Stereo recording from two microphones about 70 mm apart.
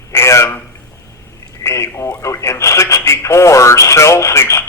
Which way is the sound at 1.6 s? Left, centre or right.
Left.